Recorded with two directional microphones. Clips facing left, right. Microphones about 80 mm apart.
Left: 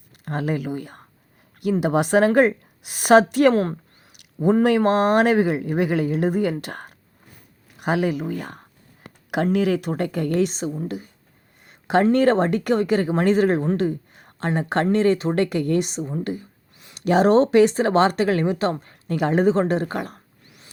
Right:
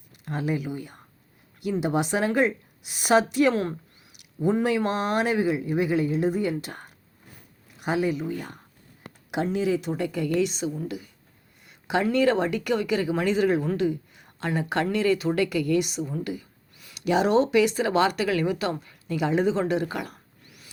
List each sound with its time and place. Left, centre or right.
0.3 s speech: left
11.6 s a sound: left
12.1 s speech: left